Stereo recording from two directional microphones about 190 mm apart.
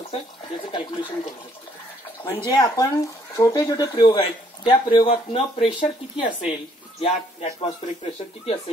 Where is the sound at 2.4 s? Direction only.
20° left (ahead or behind).